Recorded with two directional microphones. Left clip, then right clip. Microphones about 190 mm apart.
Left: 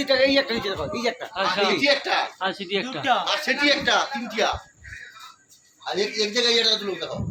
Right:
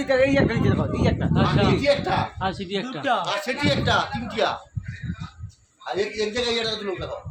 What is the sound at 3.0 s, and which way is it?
Speech, 60° right (ahead or behind).